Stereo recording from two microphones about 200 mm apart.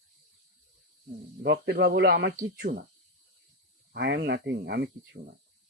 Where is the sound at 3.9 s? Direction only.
60° right (ahead or behind).